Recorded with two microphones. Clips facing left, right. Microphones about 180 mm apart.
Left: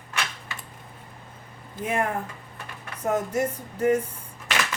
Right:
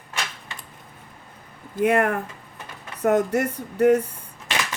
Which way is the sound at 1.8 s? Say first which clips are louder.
Right 7 dB; 70° right (ahead or behind).